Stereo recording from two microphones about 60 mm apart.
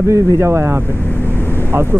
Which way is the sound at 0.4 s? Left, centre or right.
Right.